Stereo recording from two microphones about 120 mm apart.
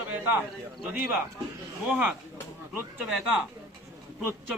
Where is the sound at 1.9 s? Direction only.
10° right (ahead or behind).